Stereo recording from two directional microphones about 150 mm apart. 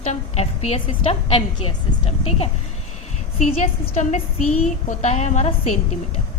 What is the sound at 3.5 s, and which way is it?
A woman's voice, 40° left (ahead or behind).